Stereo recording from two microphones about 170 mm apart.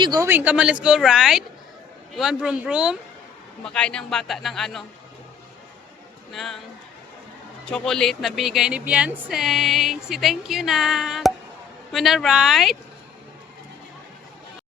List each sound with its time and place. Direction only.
0.0 s speech: 25° right (ahead or behind)
0.3 s speech: 10° right (ahead or behind)
3.6 s speech: 5° left (ahead or behind)
6.3 s speech: centre (ahead or behind)
7.7 s speech: 5° left (ahead or behind)